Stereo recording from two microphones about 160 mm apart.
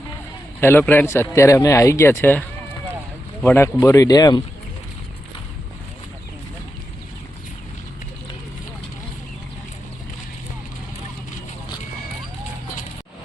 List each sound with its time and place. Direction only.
0.6 s a man's voice: 15° left (ahead or behind)
3.4 s a man's voice: 15° left (ahead or behind)